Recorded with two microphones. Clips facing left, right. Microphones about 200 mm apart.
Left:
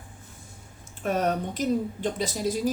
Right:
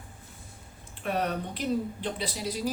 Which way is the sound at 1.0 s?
45° left (ahead or behind).